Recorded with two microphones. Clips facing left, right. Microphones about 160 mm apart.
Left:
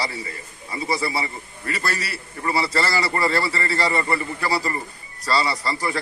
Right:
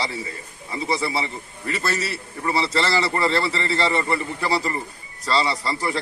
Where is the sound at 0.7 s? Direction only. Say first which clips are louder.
Even; centre (ahead or behind).